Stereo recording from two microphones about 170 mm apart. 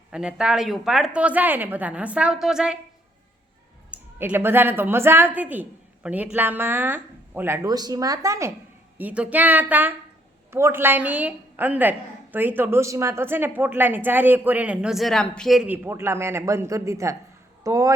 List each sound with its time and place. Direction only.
0.1 s a woman's voice: 5° right (ahead or behind)
3.9 s a woman's voice: 10° right (ahead or behind)